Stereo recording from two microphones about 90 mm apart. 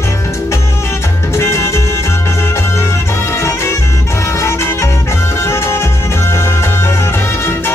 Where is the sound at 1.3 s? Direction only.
30° left (ahead or behind).